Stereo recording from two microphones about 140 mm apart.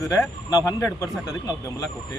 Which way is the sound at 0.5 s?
20° left (ahead or behind).